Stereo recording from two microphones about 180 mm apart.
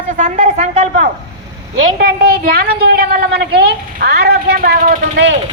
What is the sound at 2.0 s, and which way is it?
A woman's voice, 55° right (ahead or behind).